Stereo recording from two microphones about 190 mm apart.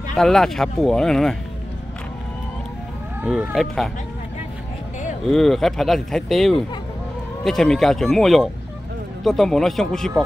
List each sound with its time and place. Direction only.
0.1 s speech: centre (ahead or behind)
3.2 s speech: 5° right (ahead or behind)
5.3 s speech: centre (ahead or behind)